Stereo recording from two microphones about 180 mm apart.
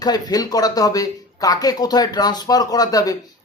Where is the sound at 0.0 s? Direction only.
20° left (ahead or behind).